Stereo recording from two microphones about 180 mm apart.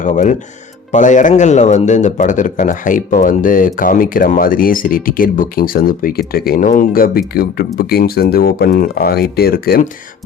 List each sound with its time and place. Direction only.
0.0 s speech: 45° left (ahead or behind)